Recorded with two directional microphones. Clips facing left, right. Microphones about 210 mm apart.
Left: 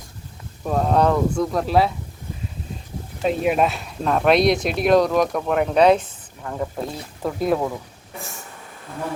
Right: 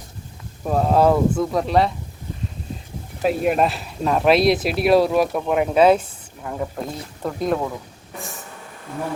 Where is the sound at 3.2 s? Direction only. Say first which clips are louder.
Right 1 dB; centre (ahead or behind).